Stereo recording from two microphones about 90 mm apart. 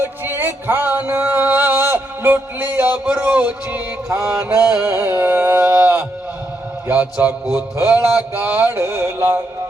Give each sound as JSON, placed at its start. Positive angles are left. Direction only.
{"t": 0.0, "sound": "music", "side_deg": -25}
{"t": 3.1, "sound": "speech", "side_deg": -15}
{"t": 4.3, "sound": "a sound", "side_deg": -15}
{"t": 6.8, "sound": "mantra", "side_deg": -20}